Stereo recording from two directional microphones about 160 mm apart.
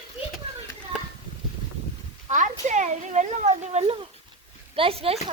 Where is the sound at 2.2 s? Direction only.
50° right (ahead or behind).